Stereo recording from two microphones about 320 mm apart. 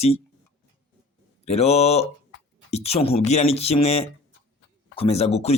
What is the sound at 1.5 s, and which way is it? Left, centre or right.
Speech, centre.